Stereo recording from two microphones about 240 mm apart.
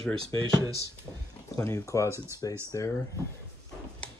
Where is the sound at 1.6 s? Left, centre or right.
Centre.